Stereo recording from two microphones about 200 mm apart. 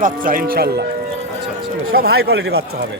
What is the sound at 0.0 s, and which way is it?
Speech, 45° right (ahead or behind).